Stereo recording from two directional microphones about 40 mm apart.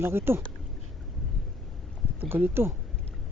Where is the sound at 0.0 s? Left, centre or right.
Right.